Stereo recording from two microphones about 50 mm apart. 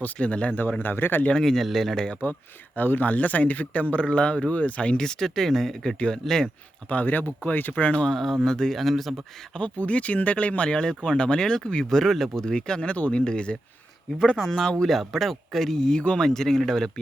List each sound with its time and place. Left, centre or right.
0.0 s speech: left
0.6 s speech: left
1.4 s speech: centre
2.7 s speech: left
4.9 s speech: centre
6.8 s speech: left
7.9 s speech: left
8.1 s speech: centre
9.6 s speech: left
10.7 s speech: centre
14.3 s speech: centre